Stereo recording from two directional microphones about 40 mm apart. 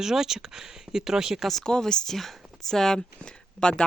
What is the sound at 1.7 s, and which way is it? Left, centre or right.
Speech, centre.